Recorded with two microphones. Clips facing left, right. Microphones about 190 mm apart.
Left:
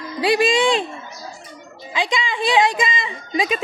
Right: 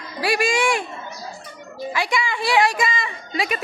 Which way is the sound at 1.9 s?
20° left (ahead or behind).